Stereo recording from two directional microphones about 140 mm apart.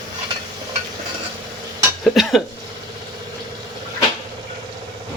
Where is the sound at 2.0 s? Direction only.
Centre (ahead or behind).